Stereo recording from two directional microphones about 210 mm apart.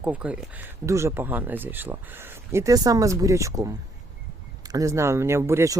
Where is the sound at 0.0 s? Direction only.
5° right (ahead or behind).